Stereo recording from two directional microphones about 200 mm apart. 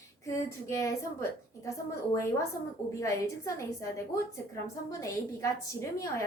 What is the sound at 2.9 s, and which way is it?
Speech, 15° left (ahead or behind).